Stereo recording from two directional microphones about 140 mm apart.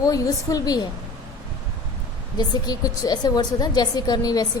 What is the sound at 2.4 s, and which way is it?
A woman's voice, 25° left (ahead or behind).